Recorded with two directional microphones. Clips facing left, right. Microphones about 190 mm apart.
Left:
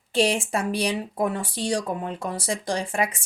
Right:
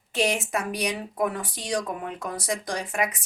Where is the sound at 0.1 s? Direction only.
30° left (ahead or behind).